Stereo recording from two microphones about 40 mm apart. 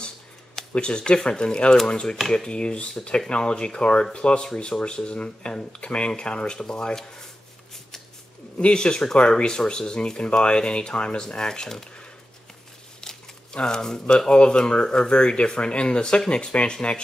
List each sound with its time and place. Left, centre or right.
0.7 s speech: left
8.5 s speech: left
13.0 s speech: centre